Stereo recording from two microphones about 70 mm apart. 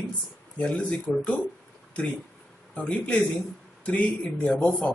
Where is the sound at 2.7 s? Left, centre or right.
Centre.